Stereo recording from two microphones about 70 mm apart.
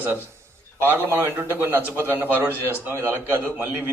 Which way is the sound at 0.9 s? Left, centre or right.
Right.